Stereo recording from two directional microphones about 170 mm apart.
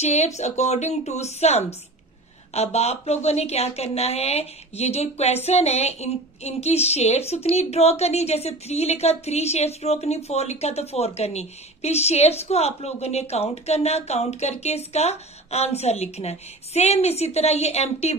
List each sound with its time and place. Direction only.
0.0 s speech: 40° left (ahead or behind)